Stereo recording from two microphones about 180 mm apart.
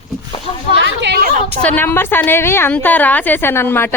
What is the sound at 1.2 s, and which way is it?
Speech, 45° right (ahead or behind).